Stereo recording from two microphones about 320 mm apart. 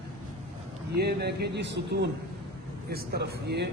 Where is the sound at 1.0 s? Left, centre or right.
Right.